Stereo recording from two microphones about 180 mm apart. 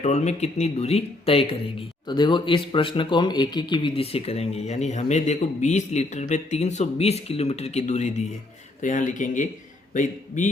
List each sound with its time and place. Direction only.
0.0 s speech: 40° left (ahead or behind)